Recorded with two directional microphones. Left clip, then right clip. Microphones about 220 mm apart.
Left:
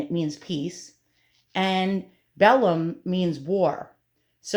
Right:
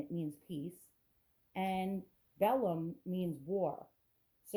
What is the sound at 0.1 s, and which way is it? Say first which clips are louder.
A woman's voice: left 15 dB; 10° right (ahead or behind).